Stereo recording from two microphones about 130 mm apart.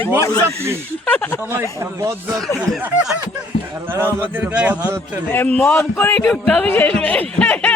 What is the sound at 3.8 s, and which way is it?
A man's voice, 15° right (ahead or behind).